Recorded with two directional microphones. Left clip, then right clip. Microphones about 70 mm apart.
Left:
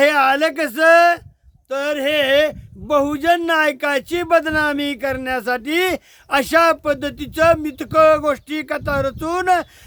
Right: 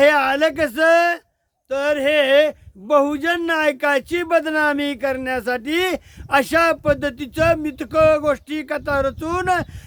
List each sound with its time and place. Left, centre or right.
0.0 s speech: left
1.7 s speech: left